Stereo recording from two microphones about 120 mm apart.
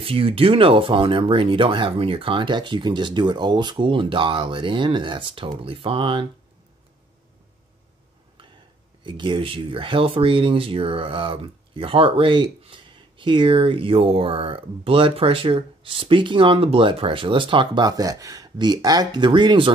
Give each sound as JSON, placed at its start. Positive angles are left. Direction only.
{"t": 0.0, "sound": "speech", "side_deg": -50}
{"t": 9.0, "sound": "speech", "side_deg": -45}